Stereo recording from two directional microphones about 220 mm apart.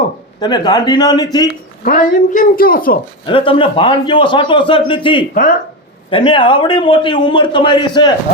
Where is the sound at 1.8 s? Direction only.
40° left (ahead or behind).